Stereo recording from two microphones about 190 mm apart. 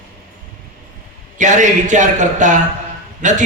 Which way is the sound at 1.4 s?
40° right (ahead or behind).